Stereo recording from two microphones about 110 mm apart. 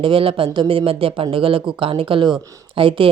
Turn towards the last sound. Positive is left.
turn(degrees=-55)  # may be behind; listen again after turning